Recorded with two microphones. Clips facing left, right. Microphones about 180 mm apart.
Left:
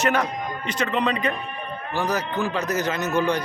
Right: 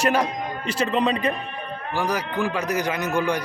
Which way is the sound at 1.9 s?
10° right (ahead or behind).